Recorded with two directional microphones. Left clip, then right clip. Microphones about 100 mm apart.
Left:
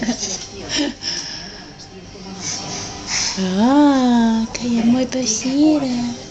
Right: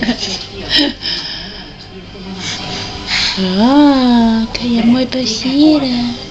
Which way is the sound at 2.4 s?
Centre (ahead or behind).